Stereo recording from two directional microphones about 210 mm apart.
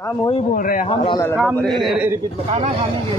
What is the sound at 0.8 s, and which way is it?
Speech, 25° left (ahead or behind).